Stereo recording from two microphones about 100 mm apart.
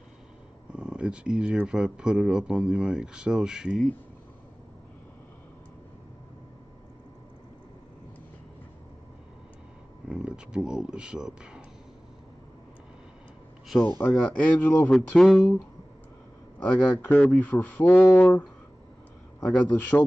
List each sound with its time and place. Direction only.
0.7 s speech: 10° right (ahead or behind)
10.0 s speech: 10° right (ahead or behind)
13.8 s speech: 15° left (ahead or behind)
14.9 s mantra: centre (ahead or behind)
16.5 s speech: 15° left (ahead or behind)